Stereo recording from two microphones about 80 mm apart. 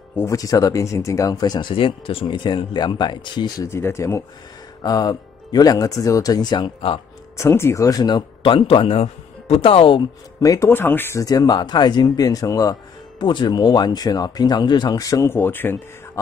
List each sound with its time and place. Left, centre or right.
0.1 s speech: left
0.4 s speech: left
1.7 s speech: left
3.6 s speech: left
4.8 s speech: left
7.3 s speech: left
7.8 s speech: left
9.6 s speech: left
10.4 s speech: left
10.7 s speech: left
11.1 s speech: left
13.2 s speech: left
15.2 s speech: left